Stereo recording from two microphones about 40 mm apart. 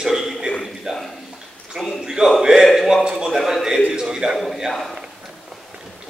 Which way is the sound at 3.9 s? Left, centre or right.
Centre.